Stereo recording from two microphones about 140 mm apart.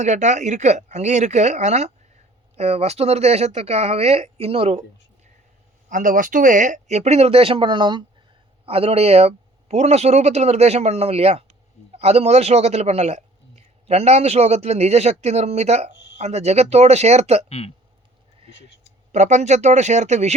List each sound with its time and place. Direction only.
0.0 s a man's voice: 60° right (ahead or behind)
5.9 s a man's voice: 70° right (ahead or behind); by 17.4 s 50° right (ahead or behind)
17.5 s speech: 45° left (ahead or behind)
19.1 s speech: 55° right (ahead or behind)